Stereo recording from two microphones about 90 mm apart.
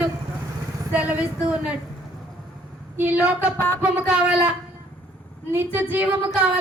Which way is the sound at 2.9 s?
20° right (ahead or behind).